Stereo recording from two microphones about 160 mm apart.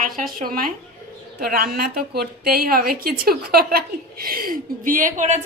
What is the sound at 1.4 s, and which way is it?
A woman's voice, 75° right (ahead or behind).